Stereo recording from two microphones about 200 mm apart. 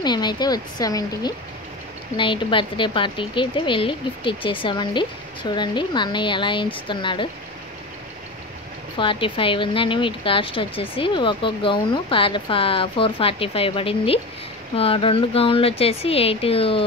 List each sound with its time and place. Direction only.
0.0 s speech: 20° left (ahead or behind)
8.9 s speech: 25° left (ahead or behind)